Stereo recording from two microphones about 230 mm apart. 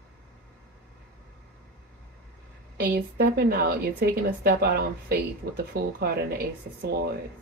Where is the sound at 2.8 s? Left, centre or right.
Right.